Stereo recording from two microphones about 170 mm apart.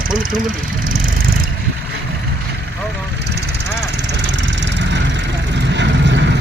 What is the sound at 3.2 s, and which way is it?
Vehicle, 80° right.